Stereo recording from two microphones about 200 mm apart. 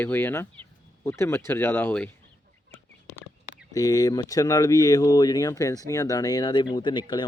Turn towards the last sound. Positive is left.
turn(degrees=25)  # may be behind; listen again after turning